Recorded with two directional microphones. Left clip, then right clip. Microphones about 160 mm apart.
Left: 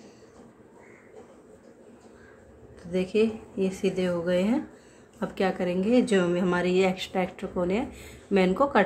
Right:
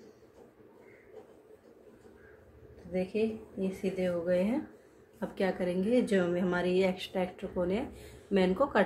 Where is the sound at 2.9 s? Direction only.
35° left (ahead or behind).